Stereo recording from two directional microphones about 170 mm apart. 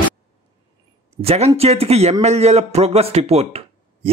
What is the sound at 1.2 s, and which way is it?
A man's voice, 35° right (ahead or behind).